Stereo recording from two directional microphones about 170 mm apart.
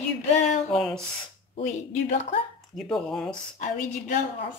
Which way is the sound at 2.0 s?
40° left (ahead or behind).